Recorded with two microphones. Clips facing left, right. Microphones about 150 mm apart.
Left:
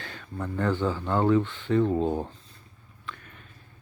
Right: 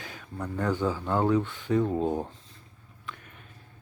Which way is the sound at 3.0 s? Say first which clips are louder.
Left 1 dB; 10° right (ahead or behind).